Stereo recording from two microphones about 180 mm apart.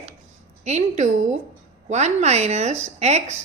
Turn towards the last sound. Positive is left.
turn(degrees=-40)  # may be behind; listen again after turning